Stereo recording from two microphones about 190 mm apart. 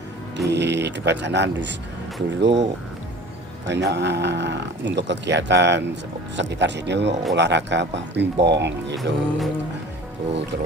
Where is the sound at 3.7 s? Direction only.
65° right (ahead or behind).